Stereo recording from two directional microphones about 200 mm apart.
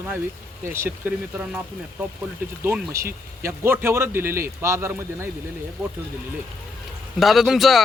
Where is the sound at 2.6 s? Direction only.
10° right (ahead or behind).